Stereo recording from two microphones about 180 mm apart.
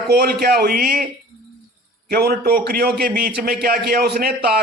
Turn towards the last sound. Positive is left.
turn(degrees=-55)  # may be behind; listen again after turning